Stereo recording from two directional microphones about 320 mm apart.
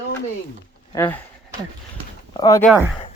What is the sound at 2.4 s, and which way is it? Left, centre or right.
Speech, centre.